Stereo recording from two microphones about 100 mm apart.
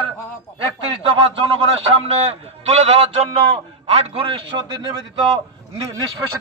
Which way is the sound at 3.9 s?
70° right (ahead or behind).